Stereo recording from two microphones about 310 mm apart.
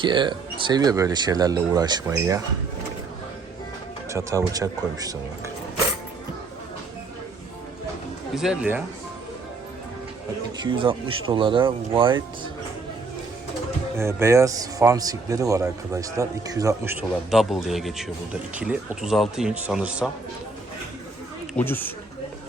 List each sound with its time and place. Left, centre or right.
0.0 s a man's voice: centre
4.1 s a man's voice: centre
8.4 s speech: centre
10.6 s a man's voice: centre
14.0 s a man's voice: centre
21.5 s speech: centre